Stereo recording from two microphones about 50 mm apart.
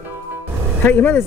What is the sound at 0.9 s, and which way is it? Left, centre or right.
Speech, left.